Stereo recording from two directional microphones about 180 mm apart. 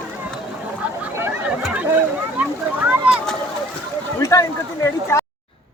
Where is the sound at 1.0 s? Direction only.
10° right (ahead or behind).